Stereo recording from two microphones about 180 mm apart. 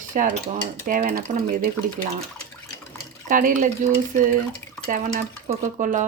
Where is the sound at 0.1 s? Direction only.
45° right (ahead or behind).